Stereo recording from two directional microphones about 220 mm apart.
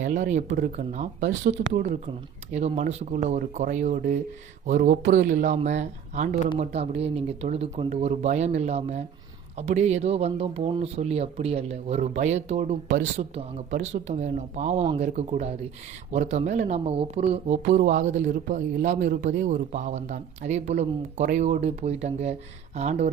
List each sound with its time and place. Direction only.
0.0 s speech: 35° right (ahead or behind)